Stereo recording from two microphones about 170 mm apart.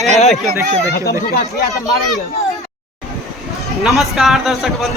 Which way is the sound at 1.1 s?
65° left (ahead or behind).